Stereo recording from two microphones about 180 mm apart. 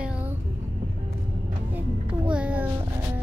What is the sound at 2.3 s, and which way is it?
Speech, 10° right (ahead or behind).